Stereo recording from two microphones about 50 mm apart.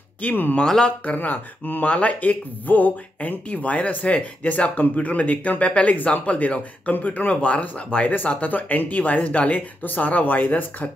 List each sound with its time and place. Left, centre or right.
0.2 s speech: left
0.6 s speech: centre
1.0 s speech: left